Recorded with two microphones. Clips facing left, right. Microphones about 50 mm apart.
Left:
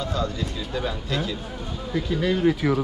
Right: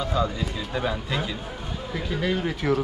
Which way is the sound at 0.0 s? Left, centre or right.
Centre.